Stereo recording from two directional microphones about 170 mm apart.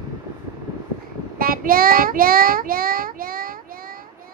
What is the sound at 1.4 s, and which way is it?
Child singing, 55° right (ahead or behind).